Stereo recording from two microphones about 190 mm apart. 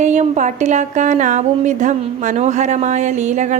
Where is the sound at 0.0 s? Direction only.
40° right (ahead or behind).